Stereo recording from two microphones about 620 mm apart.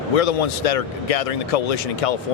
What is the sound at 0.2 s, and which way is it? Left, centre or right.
Speech, left.